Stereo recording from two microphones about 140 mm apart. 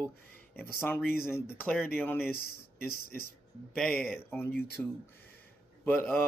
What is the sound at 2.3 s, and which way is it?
Speech, 90° left.